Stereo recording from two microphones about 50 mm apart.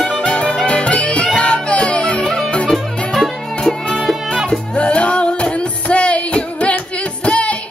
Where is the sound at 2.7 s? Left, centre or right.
Centre.